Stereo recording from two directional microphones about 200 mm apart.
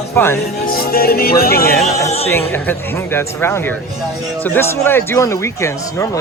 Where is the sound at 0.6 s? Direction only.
50° left (ahead or behind).